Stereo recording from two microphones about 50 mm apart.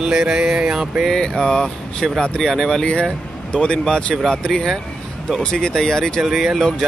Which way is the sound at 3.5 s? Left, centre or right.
Centre.